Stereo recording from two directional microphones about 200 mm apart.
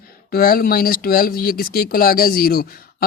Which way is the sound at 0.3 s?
50° left (ahead or behind).